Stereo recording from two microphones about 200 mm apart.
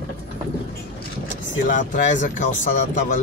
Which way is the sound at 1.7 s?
40° left (ahead or behind).